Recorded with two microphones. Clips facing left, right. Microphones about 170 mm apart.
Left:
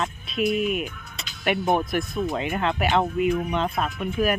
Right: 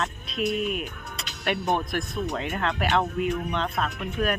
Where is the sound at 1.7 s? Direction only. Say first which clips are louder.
Left 3 dB; 5° left (ahead or behind).